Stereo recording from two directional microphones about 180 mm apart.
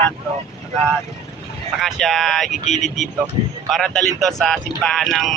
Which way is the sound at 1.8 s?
Centre (ahead or behind).